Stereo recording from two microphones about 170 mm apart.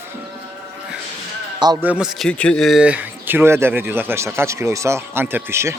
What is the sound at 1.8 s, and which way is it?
Speech, 5° right (ahead or behind).